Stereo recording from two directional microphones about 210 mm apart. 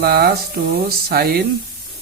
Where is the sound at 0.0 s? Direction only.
50° right (ahead or behind).